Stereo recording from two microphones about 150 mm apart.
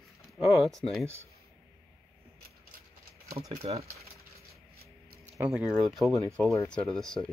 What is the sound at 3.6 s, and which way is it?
Speech, 45° right (ahead or behind).